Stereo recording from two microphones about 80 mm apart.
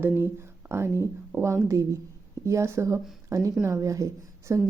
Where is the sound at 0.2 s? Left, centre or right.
Right.